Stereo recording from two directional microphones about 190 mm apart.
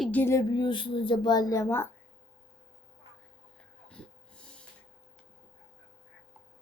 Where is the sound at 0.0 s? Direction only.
10° left (ahead or behind).